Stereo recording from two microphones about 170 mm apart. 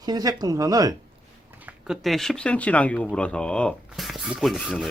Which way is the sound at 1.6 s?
Centre (ahead or behind).